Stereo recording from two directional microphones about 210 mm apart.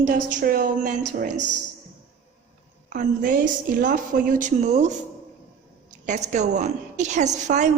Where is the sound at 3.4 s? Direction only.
40° right (ahead or behind).